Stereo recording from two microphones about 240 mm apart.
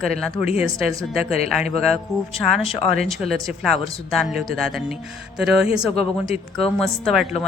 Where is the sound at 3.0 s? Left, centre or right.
Centre.